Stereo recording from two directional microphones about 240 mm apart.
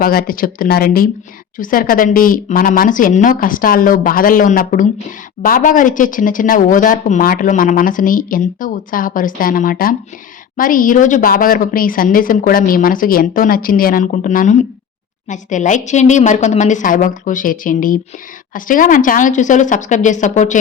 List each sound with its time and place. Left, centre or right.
0.0 s speech: left